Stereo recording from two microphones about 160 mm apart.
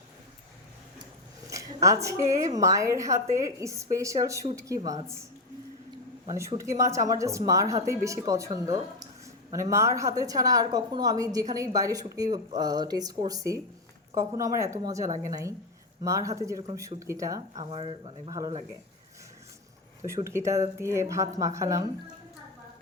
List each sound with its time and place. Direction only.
1.5 s a woman's voice: 20° right (ahead or behind)
6.2 s a woman's voice: 20° right (ahead or behind)
17.6 s speech: 35° right (ahead or behind)
18.3 s a woman's voice: 20° right (ahead or behind)
20.0 s a woman's voice: 20° right (ahead or behind)